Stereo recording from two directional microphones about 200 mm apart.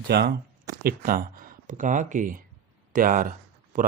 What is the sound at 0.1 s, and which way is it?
Speech, 55° right (ahead or behind).